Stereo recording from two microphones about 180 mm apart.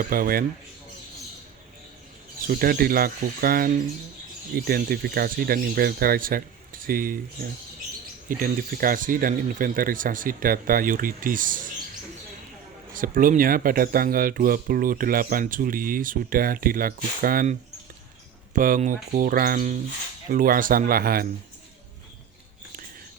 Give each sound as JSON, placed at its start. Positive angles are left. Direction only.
{"t": 0.0, "sound": "speech", "side_deg": -55}
{"t": 2.5, "sound": "speech", "side_deg": -55}
{"t": 13.0, "sound": "speech", "side_deg": -50}